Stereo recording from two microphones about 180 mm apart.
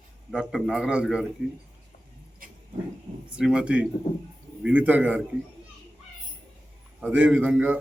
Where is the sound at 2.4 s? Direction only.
50° right (ahead or behind).